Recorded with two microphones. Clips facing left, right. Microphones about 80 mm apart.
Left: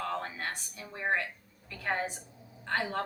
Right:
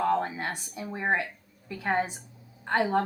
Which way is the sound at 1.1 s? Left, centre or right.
Centre.